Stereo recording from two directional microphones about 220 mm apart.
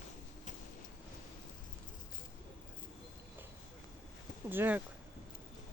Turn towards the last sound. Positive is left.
turn(degrees=-10)  # may be behind; listen again after turning